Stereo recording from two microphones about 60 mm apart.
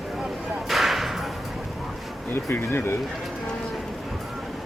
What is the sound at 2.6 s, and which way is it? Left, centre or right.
Speech, left.